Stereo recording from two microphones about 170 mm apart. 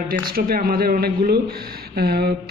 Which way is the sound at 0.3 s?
60° right (ahead or behind).